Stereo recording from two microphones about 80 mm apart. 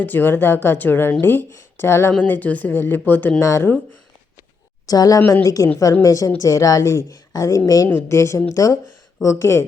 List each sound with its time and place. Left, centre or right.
0.0 s speech: left
3.4 s speech: left
4.9 s a woman's voice: left